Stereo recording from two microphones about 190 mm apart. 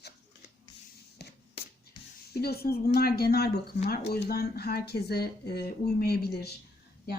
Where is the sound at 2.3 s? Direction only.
55° left (ahead or behind).